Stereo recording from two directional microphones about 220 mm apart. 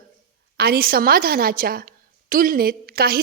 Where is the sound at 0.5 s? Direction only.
45° right (ahead or behind).